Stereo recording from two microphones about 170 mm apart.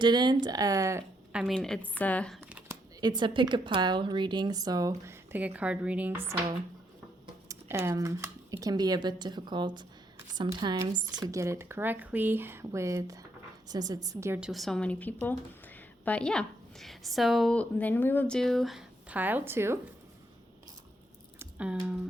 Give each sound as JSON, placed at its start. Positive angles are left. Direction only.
{"t": 0.0, "sound": "a woman's voice", "side_deg": -25}
{"t": 1.3, "sound": "a woman's voice", "side_deg": 0}
{"t": 2.4, "sound": "a sound", "side_deg": -10}
{"t": 3.0, "sound": "a woman's voice", "side_deg": -25}
{"t": 7.4, "sound": "a woman's voice", "side_deg": -15}
{"t": 21.3, "sound": "squish", "side_deg": -10}